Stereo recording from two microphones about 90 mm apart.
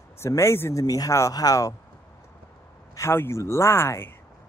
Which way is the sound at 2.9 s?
30° left (ahead or behind).